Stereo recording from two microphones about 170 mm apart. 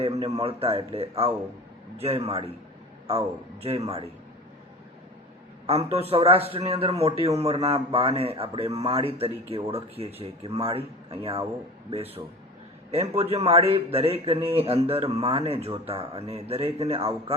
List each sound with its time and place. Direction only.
0.0 s a man's voice: 35° right (ahead or behind)
5.6 s a man's voice: 35° right (ahead or behind)